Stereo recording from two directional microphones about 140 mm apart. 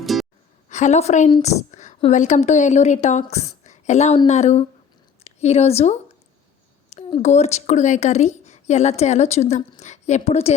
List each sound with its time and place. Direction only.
0.0 s music: centre (ahead or behind)
0.7 s a woman's voice: 55° left (ahead or behind)
1.4 s a sound: 55° left (ahead or behind)
2.0 s a woman's voice: 55° left (ahead or behind)
7.2 s a woman's voice: 50° left (ahead or behind)